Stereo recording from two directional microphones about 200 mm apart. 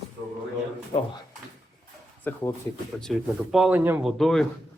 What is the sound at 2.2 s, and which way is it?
Speech, 10° left (ahead or behind).